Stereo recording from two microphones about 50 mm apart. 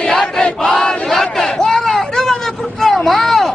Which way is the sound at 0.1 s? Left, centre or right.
Centre.